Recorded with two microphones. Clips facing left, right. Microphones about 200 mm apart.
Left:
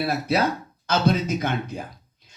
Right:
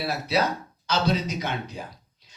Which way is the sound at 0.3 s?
55° left (ahead or behind).